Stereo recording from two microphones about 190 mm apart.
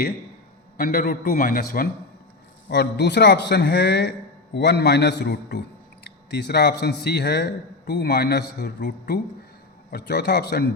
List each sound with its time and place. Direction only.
0.8 s a man's voice: 50° left (ahead or behind)
2.6 s a man's voice: 60° left (ahead or behind)